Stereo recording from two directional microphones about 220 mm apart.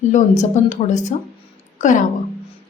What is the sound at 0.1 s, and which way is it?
Speech, 35° left (ahead or behind).